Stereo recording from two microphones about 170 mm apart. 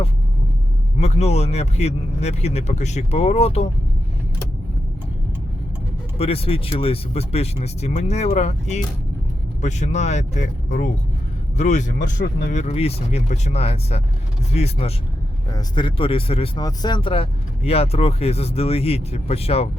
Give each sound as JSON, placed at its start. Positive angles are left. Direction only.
{"t": 0.9, "sound": "speech", "side_deg": 40}
{"t": 6.1, "sound": "speech", "side_deg": 35}
{"t": 12.5, "sound": "speech", "side_deg": 40}
{"t": 15.5, "sound": "speech", "side_deg": 30}